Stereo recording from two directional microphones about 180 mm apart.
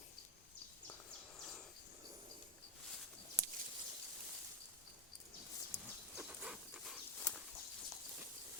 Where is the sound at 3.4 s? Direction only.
30° left (ahead or behind).